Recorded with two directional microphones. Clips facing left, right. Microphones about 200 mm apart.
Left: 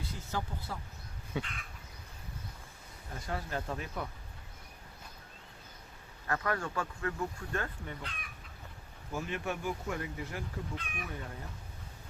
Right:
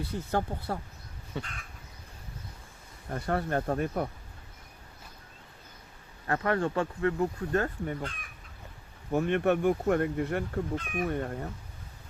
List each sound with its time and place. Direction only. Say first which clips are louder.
0.0 s speech: right 8 dB; 60° right (ahead or behind)
1.3 s a sound: even; 5° left (ahead or behind)
3.1 s speech: right 9 dB; 60° right (ahead or behind)
6.2 s speech: right 6 dB; 30° right (ahead or behind)
9.1 s speech: right 11 dB; 60° right (ahead or behind)
10.8 s speech: right 11 dB; 45° right (ahead or behind)
11.1 s speech: right 11 dB; 60° right (ahead or behind)